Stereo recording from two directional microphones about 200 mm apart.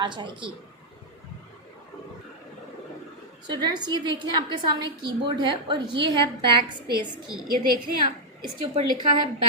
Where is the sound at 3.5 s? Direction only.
20° right (ahead or behind).